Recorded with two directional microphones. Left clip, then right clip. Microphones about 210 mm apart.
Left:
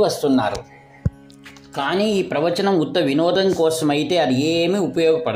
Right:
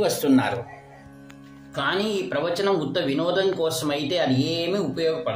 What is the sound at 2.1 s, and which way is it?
Speech, 30° left (ahead or behind).